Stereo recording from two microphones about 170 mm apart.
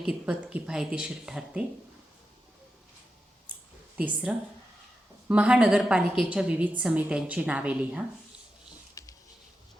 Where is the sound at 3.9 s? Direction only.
5° right (ahead or behind).